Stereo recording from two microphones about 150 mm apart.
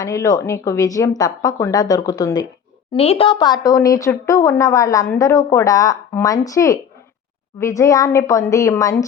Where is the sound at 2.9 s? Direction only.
40° left (ahead or behind).